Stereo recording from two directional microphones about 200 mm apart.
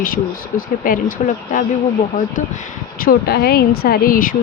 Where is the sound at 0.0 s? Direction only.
45° left (ahead or behind).